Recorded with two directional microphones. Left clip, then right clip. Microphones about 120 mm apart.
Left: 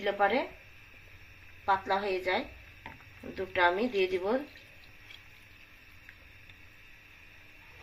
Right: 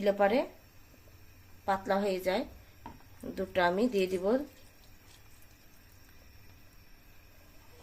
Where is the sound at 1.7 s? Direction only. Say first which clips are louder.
Left 1 dB; 50° right (ahead or behind).